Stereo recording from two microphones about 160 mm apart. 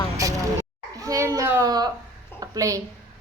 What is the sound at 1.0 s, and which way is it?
Speech, 20° right (ahead or behind).